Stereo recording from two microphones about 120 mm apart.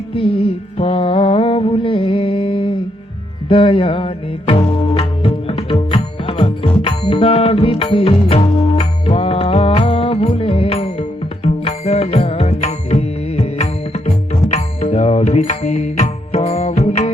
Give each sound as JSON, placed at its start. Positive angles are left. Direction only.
{"t": 0.1, "sound": "music", "side_deg": 50}